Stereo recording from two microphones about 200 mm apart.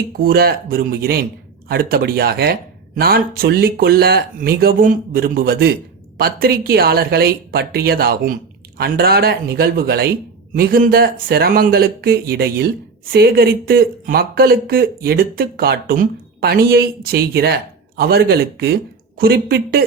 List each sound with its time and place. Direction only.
0.2 s speech: 45° right (ahead or behind)